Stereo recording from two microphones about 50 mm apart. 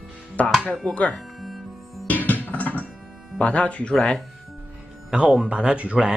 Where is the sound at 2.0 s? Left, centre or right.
Left.